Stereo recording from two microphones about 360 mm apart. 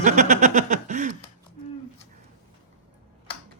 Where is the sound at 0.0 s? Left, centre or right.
Centre.